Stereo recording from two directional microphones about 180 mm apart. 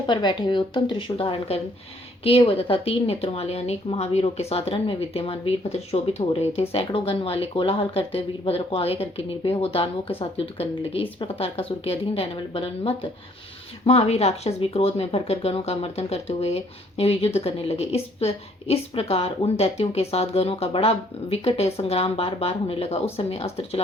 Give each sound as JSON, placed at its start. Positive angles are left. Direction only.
{"t": 0.1, "sound": "speech", "side_deg": 25}